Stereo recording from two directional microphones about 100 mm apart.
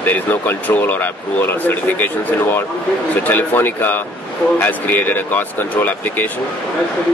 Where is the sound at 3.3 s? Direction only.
20° left (ahead or behind).